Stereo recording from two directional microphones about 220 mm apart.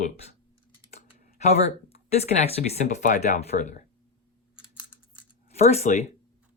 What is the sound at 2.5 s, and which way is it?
Speech, 30° left (ahead or behind).